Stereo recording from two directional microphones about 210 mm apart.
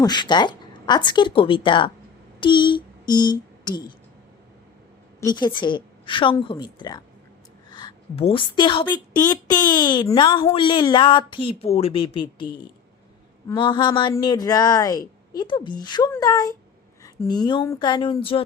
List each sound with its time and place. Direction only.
0.0 s speech: 20° left (ahead or behind)
2.4 s a sound: 25° left (ahead or behind)
5.2 s a woman's voice: 20° left (ahead or behind)
13.6 s speech: 20° left (ahead or behind)